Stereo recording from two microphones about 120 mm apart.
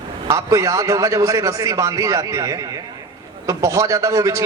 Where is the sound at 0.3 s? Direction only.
25° right (ahead or behind).